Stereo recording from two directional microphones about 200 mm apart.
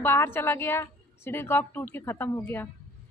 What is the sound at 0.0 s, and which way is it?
A woman's voice, 10° left (ahead or behind).